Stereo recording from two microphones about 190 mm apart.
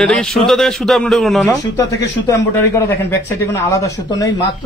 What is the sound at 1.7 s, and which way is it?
A man's voice, 15° left (ahead or behind).